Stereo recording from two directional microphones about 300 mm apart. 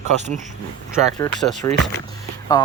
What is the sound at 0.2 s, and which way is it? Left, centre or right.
Speech, right.